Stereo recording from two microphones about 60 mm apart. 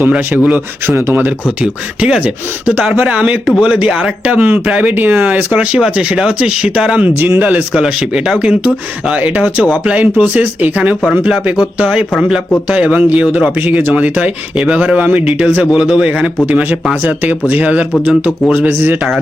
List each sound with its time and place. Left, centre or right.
0.1 s speech: right
0.9 s speech: right
1.6 s speech: centre
3.4 s speech: centre
3.7 s speech: centre
4.4 s speech: right
4.9 s speech: right
7.2 s speech: right
7.7 s speech: centre
12.6 s speech: right
17.0 s speech: right
18.1 s speech: centre